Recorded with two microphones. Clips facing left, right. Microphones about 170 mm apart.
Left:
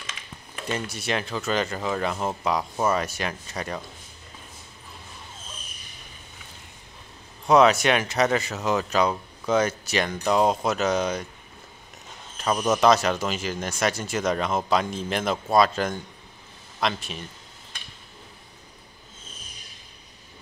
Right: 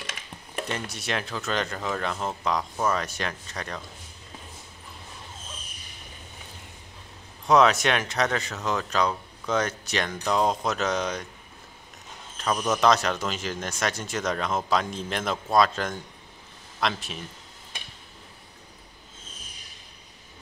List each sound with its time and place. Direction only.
0.7 s speech: centre (ahead or behind)
7.4 s speech: centre (ahead or behind)
12.5 s speech: 15° left (ahead or behind)
12.8 s speech: 5° left (ahead or behind)